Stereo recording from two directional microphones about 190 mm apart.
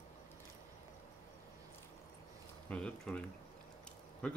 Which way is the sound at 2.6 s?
5° left (ahead or behind).